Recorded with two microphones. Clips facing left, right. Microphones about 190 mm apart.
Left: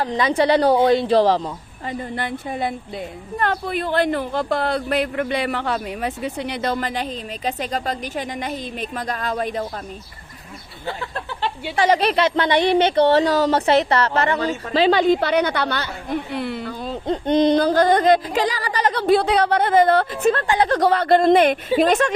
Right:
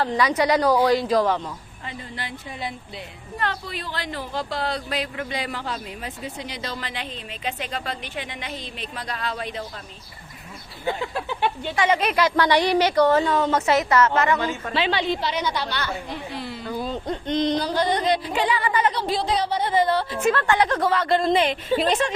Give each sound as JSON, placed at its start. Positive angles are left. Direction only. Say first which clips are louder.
{"t": 0.0, "sound": "speech", "louder": "left 2 dB", "side_deg": 20}
{"t": 2.0, "sound": "speech", "louder": "left 9 dB", "side_deg": 50}
{"t": 10.8, "sound": "speech", "louder": "right 2 dB", "side_deg": -15}
{"t": 11.8, "sound": "speech", "louder": "left 4 dB", "side_deg": 35}
{"t": 17.1, "sound": "speech", "louder": "left 6 dB", "side_deg": 25}
{"t": 17.5, "sound": "speech", "louder": "left 7 dB", "side_deg": 55}
{"t": 18.9, "sound": "speech", "louder": "left 7 dB", "side_deg": 60}
{"t": 20.6, "sound": "speech", "louder": "left 4 dB", "side_deg": 35}
{"t": 20.9, "sound": "speech", "louder": "left 6 dB", "side_deg": 55}